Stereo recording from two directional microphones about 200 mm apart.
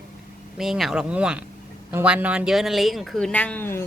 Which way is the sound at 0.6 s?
Centre (ahead or behind).